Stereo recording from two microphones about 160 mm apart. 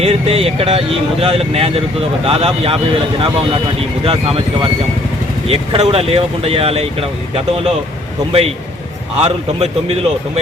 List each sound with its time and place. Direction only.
0.0 s speech: 40° right (ahead or behind)
5.5 s speech: 40° right (ahead or behind)
8.3 s speech: 40° right (ahead or behind)